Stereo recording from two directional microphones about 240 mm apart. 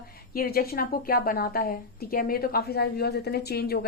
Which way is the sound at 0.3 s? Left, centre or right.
Left.